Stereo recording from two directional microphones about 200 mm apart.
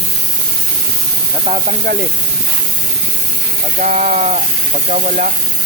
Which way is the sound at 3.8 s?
35° right (ahead or behind).